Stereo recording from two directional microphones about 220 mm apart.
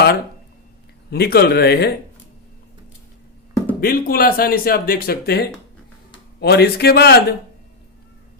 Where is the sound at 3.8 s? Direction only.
45° left (ahead or behind).